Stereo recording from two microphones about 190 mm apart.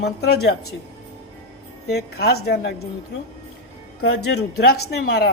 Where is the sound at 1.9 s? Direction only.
60° left (ahead or behind).